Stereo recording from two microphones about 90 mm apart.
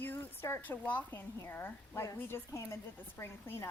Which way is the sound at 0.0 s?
20° left (ahead or behind).